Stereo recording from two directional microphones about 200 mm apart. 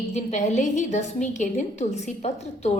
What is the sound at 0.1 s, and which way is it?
A woman's voice, 35° left (ahead or behind).